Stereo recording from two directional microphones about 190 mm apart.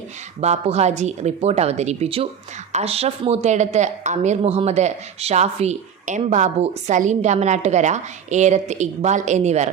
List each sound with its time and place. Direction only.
0.3 s a woman's voice: 35° right (ahead or behind)